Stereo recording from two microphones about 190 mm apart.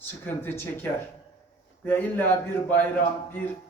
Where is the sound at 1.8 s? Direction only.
10° left (ahead or behind).